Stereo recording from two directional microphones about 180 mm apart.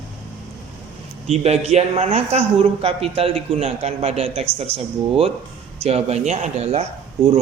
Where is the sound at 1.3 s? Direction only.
35° right (ahead or behind).